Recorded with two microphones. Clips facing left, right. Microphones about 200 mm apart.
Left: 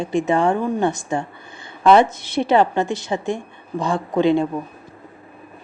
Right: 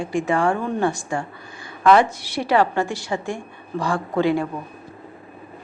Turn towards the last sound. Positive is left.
turn(degrees=20)  # may be behind; listen again after turning